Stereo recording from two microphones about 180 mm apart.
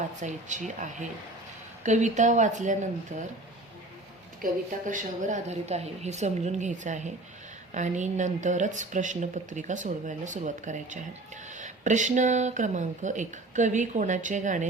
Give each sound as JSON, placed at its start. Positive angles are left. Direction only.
{"t": 0.2, "sound": "speech", "side_deg": -45}
{"t": 4.4, "sound": "a woman's voice", "side_deg": -50}